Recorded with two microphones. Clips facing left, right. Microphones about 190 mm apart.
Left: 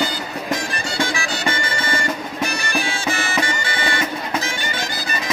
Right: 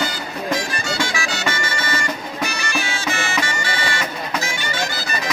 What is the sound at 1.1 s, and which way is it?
Music, 35° left (ahead or behind).